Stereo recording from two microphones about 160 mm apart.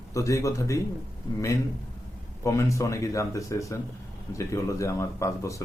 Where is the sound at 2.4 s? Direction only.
20° left (ahead or behind).